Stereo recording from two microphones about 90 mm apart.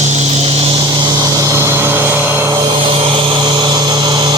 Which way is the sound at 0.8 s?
55° right (ahead or behind).